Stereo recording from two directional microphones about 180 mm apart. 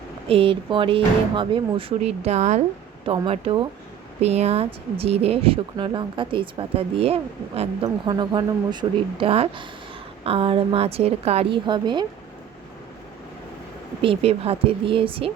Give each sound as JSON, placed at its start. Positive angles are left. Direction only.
{"t": 0.3, "sound": "a woman's voice", "side_deg": -30}
{"t": 14.0, "sound": "speech", "side_deg": -30}